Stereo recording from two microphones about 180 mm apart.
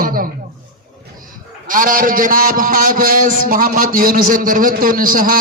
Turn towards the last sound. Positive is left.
turn(degrees=-50)  # may be behind; listen again after turning